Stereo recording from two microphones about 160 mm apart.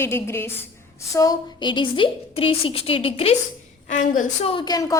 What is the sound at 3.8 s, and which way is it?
Speech, 50° left (ahead or behind).